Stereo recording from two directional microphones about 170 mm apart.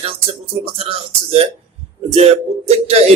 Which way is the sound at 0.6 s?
35° right (ahead or behind).